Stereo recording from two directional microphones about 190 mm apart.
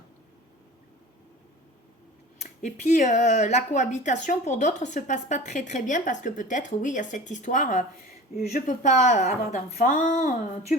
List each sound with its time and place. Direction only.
2.4 s speech: 40° left (ahead or behind)